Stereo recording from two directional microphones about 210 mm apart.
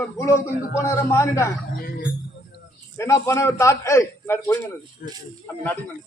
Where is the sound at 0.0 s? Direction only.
15° left (ahead or behind).